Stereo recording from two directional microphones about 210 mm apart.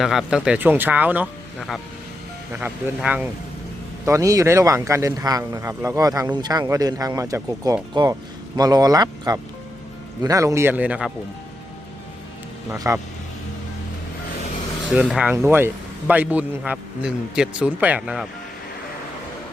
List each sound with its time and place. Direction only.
0.0 s speech: centre (ahead or behind)
12.7 s speech: 15° right (ahead or behind)
14.9 s speech: 5° right (ahead or behind)